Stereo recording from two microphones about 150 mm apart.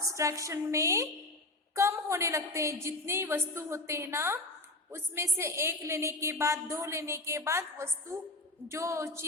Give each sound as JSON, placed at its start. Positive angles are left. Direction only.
{"t": 0.0, "sound": "a woman's voice", "side_deg": -20}